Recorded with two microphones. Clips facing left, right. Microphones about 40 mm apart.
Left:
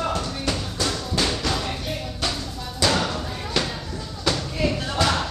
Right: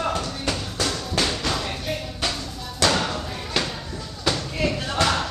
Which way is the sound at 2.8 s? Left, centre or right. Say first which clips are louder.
Even; centre.